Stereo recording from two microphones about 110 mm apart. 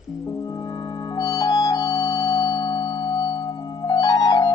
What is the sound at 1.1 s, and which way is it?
Music, 35° left (ahead or behind).